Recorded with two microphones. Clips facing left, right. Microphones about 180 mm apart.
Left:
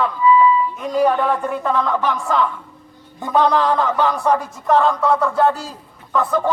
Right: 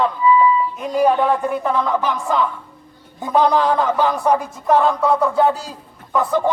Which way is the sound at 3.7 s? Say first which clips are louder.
Right 1 dB; 15° right (ahead or behind).